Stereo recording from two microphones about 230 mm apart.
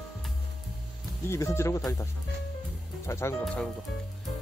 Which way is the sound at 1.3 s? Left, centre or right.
Centre.